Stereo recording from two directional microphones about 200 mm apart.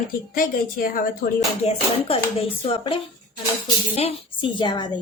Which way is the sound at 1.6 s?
30° left (ahead or behind).